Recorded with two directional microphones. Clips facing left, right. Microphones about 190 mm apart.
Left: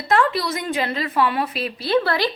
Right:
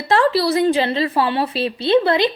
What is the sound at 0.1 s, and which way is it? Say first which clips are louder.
A woman's voice: right 4 dB; 30° right (ahead or behind).